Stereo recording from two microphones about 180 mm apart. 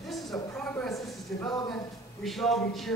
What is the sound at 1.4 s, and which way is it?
Speech, 25° left (ahead or behind).